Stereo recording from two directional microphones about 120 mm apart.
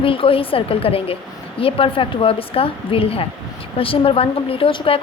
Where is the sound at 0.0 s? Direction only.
50° left (ahead or behind).